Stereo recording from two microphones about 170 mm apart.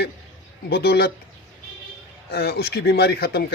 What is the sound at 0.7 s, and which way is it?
Speech, 70° left (ahead or behind).